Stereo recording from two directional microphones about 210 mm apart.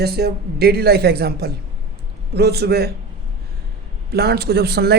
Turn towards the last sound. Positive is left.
turn(degrees=-50)  # may be behind; listen again after turning